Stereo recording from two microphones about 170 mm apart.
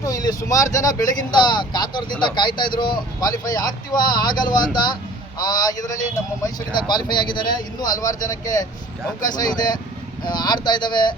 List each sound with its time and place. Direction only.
0.0 s a man's voice: 20° left (ahead or behind)